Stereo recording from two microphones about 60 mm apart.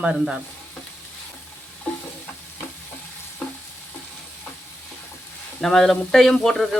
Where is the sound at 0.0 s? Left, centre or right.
Centre.